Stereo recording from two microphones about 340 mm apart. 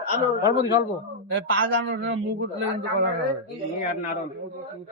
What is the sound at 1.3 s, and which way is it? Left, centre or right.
Speech, right.